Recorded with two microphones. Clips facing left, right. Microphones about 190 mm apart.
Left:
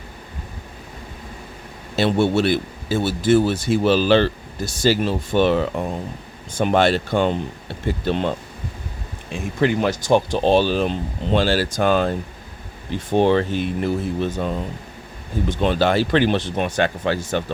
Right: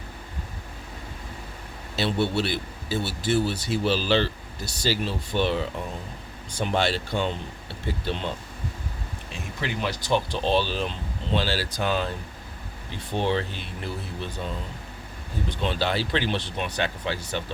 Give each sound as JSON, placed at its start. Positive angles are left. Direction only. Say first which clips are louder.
{"t": 2.0, "sound": "speech", "louder": "left 7 dB", "side_deg": 50}
{"t": 9.3, "sound": "speech", "louder": "left 12 dB", "side_deg": 50}